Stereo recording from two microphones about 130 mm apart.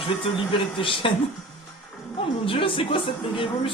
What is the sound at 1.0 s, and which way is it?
A woman's voice, 40° left (ahead or behind).